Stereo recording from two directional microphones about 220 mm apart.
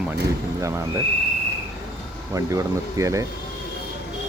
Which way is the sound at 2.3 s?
15° right (ahead or behind).